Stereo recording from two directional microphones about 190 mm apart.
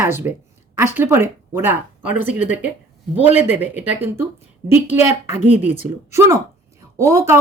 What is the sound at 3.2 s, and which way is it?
Speech, 10° right (ahead or behind).